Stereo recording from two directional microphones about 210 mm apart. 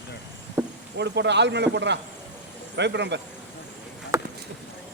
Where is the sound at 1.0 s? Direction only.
55° right (ahead or behind).